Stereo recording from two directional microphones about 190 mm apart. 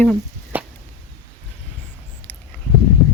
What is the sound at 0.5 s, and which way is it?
Whip, 10° right (ahead or behind).